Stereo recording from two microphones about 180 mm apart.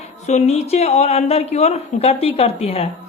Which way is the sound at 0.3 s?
40° left (ahead or behind).